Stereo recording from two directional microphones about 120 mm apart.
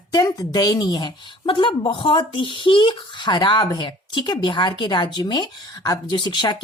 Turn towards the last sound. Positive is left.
turn(degrees=40)  # may be behind; listen again after turning